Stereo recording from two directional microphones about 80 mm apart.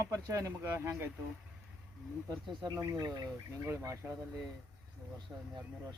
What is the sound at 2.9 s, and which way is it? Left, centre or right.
Speech, right.